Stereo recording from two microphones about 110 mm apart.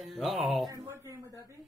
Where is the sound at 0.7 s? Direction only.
30° right (ahead or behind).